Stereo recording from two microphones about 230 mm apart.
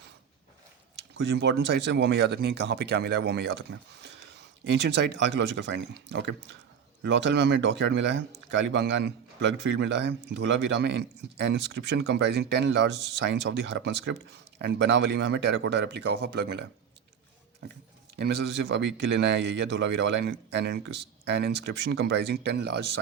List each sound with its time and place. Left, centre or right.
1.4 s speech: right
18.2 s speech: right